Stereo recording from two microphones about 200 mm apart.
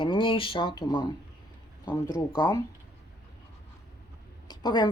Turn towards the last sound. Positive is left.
turn(degrees=20)  # may be behind; listen again after turning